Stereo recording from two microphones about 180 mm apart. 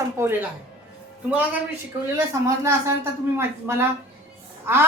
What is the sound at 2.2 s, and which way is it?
A woman's voice, 15° right (ahead or behind).